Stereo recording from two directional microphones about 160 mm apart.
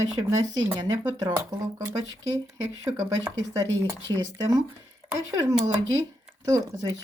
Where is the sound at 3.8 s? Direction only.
20° right (ahead or behind).